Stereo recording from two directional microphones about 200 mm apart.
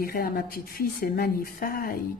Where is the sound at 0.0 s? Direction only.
45° left (ahead or behind).